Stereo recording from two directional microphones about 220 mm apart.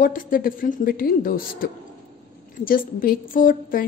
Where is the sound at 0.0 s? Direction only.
40° left (ahead or behind).